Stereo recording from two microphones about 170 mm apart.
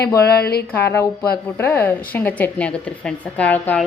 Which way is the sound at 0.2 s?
65° left (ahead or behind).